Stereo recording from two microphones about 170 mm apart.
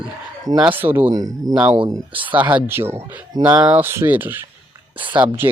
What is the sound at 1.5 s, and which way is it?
Speech, 5° right (ahead or behind).